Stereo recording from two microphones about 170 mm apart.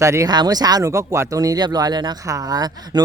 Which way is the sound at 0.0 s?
15° right (ahead or behind).